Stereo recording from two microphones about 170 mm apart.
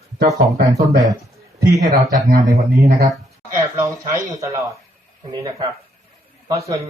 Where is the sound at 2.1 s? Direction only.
55° right (ahead or behind).